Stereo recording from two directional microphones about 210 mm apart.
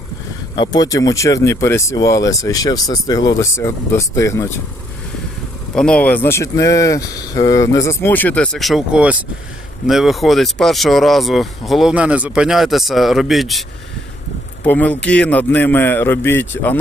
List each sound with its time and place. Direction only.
0.5 s speech: 20° left (ahead or behind)
5.7 s speech: 5° left (ahead or behind)